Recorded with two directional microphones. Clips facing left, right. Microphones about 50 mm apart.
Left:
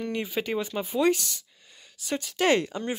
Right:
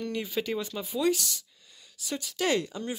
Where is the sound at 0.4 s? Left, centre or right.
Left.